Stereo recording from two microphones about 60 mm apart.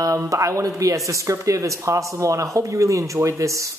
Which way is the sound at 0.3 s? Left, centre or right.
Right.